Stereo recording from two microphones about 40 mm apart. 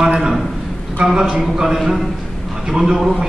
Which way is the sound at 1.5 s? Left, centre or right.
Centre.